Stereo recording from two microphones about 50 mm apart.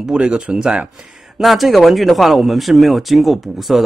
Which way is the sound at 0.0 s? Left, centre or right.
Centre.